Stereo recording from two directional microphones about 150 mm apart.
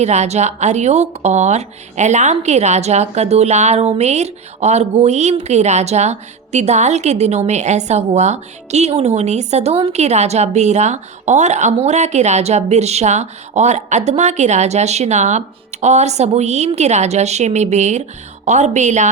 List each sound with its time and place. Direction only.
0.0 s a woman's voice: 50° right (ahead or behind)